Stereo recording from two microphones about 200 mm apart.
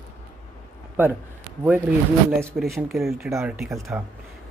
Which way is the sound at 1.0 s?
10° right (ahead or behind).